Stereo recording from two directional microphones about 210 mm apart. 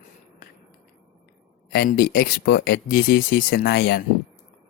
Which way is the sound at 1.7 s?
45° left (ahead or behind).